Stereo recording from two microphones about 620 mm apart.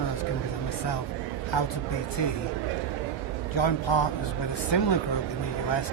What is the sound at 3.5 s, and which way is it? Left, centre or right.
Speech, left.